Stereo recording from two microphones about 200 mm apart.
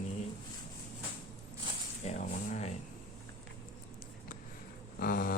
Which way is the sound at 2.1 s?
35° left (ahead or behind).